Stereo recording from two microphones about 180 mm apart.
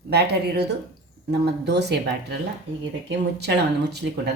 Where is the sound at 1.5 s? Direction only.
70° right (ahead or behind).